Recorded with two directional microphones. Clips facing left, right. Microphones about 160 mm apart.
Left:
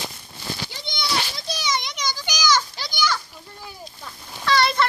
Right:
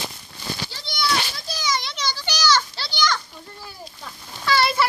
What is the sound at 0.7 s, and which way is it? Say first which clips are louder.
Children playing: right 5 dB; 20° left (ahead or behind).